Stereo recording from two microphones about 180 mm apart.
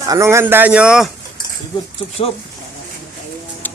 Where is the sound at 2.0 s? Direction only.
15° left (ahead or behind).